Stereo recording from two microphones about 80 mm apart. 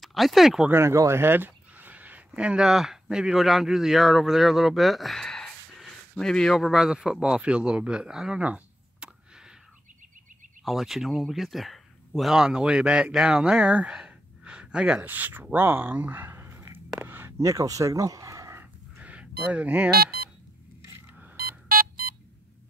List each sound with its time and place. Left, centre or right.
0.0 s speech: centre
0.7 s speech: right; by 6.9 s centre
6.9 s speech: centre
10.6 s speech: centre; by 16.8 s right
17.0 s a sound: right
17.4 s speech: right
18.6 s a sound: centre